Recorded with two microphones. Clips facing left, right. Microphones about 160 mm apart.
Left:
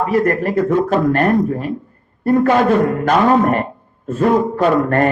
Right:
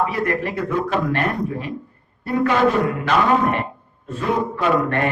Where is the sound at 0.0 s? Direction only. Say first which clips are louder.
Left 6 dB; 45° left (ahead or behind).